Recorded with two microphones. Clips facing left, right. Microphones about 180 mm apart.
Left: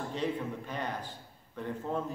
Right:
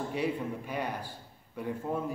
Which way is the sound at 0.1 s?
10° right (ahead or behind).